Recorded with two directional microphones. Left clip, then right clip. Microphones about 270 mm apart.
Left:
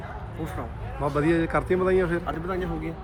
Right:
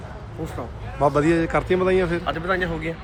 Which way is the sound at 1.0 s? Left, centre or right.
Centre.